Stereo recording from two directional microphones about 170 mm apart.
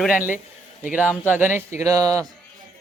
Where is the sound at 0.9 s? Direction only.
10° right (ahead or behind).